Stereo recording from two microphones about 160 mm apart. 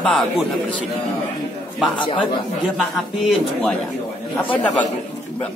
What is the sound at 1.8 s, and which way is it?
A man's voice, centre (ahead or behind).